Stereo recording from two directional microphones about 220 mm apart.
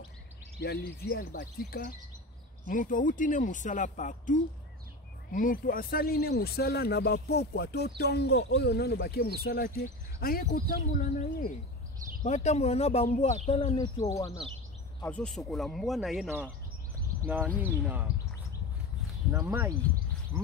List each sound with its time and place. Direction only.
0.6 s speech: 45° left (ahead or behind); by 16.4 s 5° right (ahead or behind)
17.8 s speech: 5° right (ahead or behind)
19.3 s speech: 10° right (ahead or behind)